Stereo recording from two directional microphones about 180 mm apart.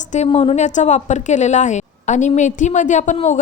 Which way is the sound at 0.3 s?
30° left (ahead or behind).